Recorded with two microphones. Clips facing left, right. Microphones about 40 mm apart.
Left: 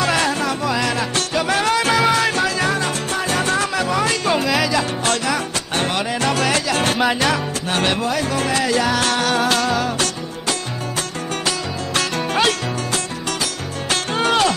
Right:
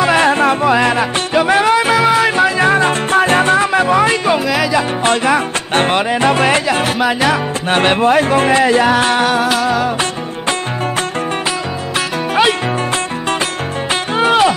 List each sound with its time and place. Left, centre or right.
0.0 s music: right
4.3 s music: centre
5.0 s music: right
6.8 s music: centre
7.7 s music: right
9.3 s music: centre
14.1 s music: centre